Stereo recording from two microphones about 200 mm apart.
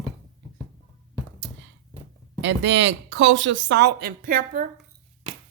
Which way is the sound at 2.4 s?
60° right (ahead or behind).